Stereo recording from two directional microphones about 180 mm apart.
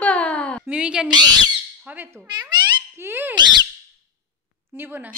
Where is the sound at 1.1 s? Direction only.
25° right (ahead or behind).